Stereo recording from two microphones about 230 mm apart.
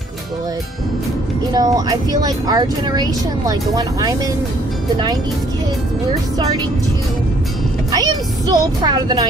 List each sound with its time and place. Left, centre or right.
1.5 s speech: centre
7.9 s music: centre